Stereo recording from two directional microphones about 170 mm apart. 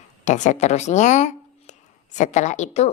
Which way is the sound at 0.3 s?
45° left (ahead or behind).